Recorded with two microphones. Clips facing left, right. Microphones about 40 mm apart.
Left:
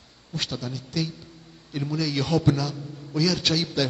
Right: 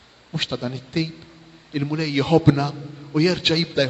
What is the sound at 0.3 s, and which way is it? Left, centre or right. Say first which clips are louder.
A man's voice: right 5 dB; right.